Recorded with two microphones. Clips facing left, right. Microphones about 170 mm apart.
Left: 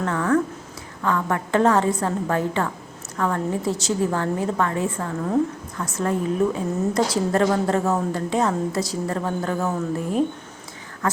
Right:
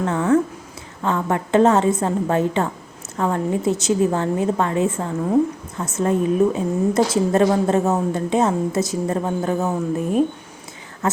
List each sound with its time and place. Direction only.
0.0 s a woman's voice: 20° right (ahead or behind)